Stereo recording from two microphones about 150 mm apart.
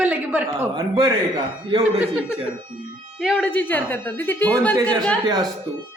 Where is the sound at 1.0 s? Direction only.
30° right (ahead or behind).